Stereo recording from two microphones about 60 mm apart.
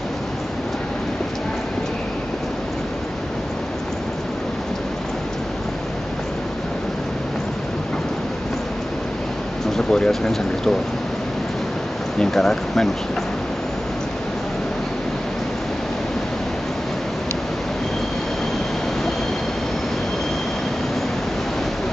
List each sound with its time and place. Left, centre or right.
9.8 s speech: centre
12.2 s speech: centre